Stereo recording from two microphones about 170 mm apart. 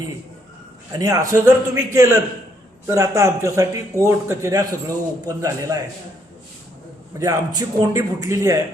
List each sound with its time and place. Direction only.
0.9 s a man's voice: 20° right (ahead or behind)
7.2 s a man's voice: 20° right (ahead or behind)